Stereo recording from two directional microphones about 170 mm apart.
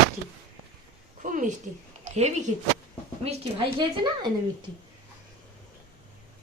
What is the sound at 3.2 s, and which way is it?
A woman's voice, 30° right (ahead or behind).